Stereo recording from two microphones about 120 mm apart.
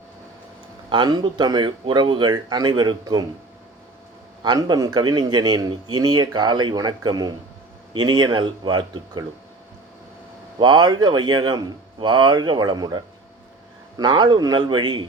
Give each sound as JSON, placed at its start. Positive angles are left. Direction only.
{"t": 0.9, "sound": "speech", "side_deg": -40}
{"t": 4.4, "sound": "speech", "side_deg": -35}
{"t": 10.6, "sound": "speech", "side_deg": -40}